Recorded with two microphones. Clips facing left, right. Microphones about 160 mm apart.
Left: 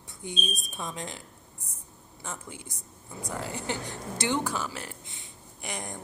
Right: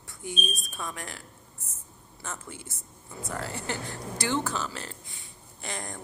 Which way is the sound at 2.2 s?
15° left (ahead or behind).